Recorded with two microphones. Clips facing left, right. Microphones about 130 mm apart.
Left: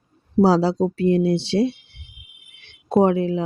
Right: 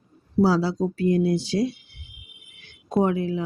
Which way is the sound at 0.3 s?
30° left (ahead or behind).